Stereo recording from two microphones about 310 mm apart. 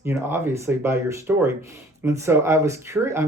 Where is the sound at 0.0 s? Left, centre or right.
Centre.